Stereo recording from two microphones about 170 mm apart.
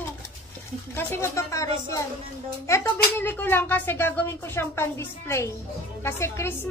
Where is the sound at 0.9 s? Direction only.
15° left (ahead or behind).